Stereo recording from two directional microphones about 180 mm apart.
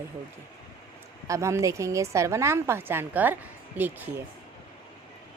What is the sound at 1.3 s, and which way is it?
A woman's voice, 15° right (ahead or behind).